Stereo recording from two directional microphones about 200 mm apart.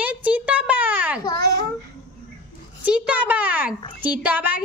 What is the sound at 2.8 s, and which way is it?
A woman's voice, 5° right (ahead or behind).